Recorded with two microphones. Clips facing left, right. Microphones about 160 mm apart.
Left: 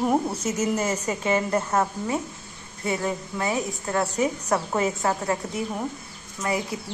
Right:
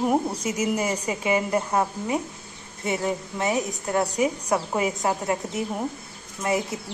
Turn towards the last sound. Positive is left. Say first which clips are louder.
# right 2 dB
turn(degrees=-25)  # may be behind; listen again after turning